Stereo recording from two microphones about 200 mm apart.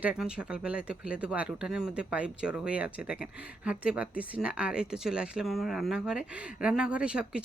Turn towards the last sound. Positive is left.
turn(degrees=-5)  # may be behind; listen again after turning